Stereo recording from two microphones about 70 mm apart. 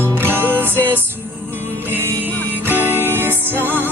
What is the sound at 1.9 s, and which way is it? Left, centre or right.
Music, right.